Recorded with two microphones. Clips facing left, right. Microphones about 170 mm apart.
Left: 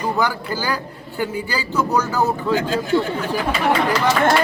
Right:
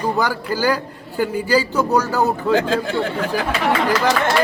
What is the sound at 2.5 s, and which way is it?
Speech, 90° right.